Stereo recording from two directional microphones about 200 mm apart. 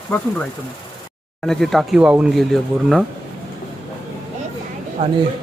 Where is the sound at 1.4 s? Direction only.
Centre (ahead or behind).